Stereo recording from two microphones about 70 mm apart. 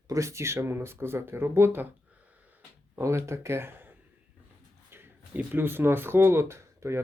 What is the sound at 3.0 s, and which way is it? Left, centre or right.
Speech, right.